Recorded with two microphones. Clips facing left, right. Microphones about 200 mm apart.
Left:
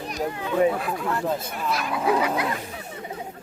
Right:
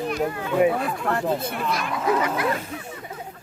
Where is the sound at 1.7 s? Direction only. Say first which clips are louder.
Left 2 dB; 5° left (ahead or behind).